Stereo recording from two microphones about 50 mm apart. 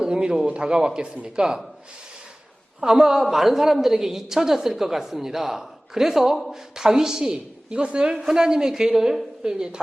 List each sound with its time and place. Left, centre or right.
0.0 s a man's voice: centre
2.8 s a woman's voice: centre